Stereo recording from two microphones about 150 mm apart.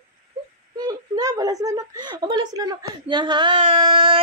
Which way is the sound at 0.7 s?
25° right (ahead or behind).